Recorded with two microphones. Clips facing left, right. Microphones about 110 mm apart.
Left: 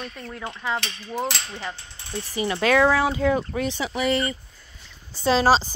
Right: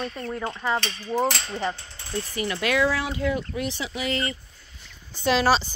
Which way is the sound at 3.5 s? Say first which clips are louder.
Left 3 dB; 45° left (ahead or behind).